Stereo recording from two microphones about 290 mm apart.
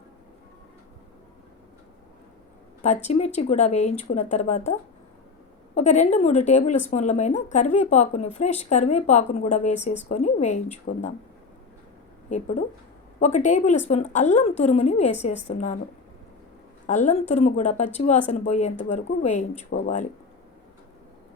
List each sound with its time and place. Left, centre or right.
2.8 s speech: left
5.7 s speech: left
13.1 s speech: left
16.8 s speech: left